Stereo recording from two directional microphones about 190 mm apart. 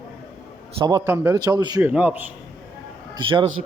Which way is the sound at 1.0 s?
10° right (ahead or behind).